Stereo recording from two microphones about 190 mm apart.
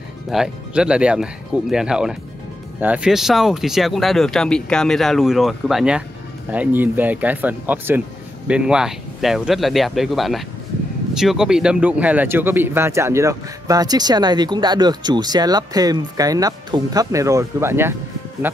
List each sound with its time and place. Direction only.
0.3 s a man's voice: 5° right (ahead or behind)